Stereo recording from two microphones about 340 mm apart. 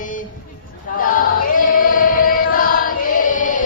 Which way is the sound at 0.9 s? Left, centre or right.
Left.